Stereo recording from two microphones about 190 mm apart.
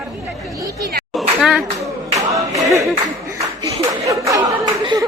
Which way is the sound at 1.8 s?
15° right (ahead or behind).